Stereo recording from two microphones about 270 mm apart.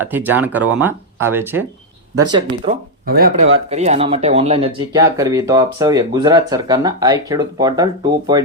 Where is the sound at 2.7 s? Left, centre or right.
Right.